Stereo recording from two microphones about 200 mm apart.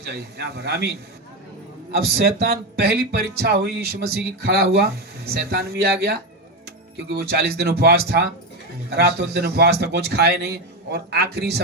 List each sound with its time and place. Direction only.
0.0 s a man's voice: 55° right (ahead or behind)
2.0 s a man's voice: 50° right (ahead or behind)